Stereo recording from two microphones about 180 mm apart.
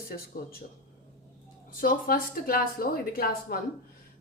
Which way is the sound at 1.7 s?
50° left (ahead or behind).